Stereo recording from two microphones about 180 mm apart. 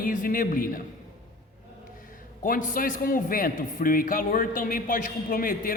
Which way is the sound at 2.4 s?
45° left (ahead or behind).